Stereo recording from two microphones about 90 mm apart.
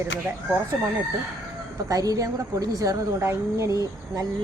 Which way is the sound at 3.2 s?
30° right (ahead or behind).